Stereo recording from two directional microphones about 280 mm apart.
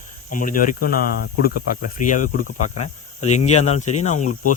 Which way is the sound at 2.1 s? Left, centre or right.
Left.